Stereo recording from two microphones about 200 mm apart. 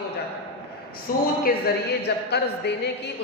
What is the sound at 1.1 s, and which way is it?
A man's voice, 45° left (ahead or behind).